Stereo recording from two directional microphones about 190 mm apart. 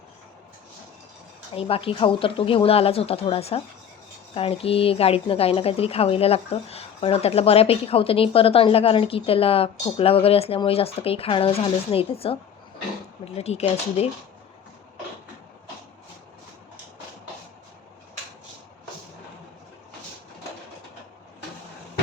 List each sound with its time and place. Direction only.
1.5 s speech: 30° left (ahead or behind)